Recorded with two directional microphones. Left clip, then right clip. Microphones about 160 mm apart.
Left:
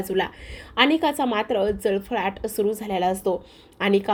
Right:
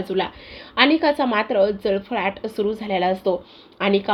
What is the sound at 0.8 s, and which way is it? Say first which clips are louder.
A woman's voice: right 3 dB; 25° left (ahead or behind).